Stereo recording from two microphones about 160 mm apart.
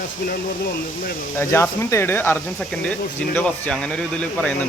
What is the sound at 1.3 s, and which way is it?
Speech, 15° left (ahead or behind).